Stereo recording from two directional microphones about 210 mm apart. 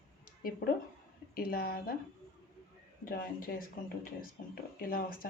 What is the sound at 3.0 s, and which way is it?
Speech, 45° left (ahead or behind).